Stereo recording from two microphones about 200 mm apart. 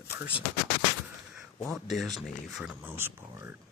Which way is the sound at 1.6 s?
Centre (ahead or behind).